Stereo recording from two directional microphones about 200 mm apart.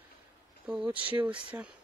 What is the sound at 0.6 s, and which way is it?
Speech, 5° right (ahead or behind).